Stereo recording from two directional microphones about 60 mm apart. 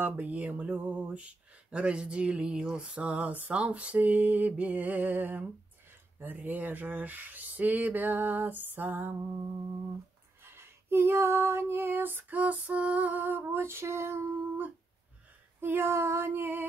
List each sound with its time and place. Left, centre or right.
0.0 s speech: right
10.4 s female singing: right
15.6 s female singing: right